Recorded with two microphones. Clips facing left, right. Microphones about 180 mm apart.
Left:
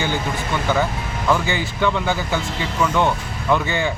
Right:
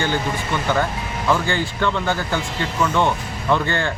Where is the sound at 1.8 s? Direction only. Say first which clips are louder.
Left 4 dB; 10° left (ahead or behind).